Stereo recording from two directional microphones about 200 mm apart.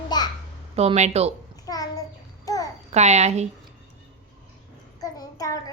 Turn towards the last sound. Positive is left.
turn(degrees=15)  # may be behind; listen again after turning